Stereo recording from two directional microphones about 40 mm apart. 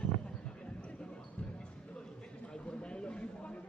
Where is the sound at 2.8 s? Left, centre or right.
Left.